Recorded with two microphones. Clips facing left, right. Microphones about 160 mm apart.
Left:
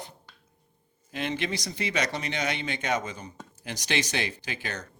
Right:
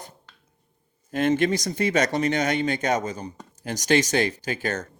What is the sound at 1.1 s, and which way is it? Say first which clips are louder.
Speech: right 9 dB; 45° right (ahead or behind).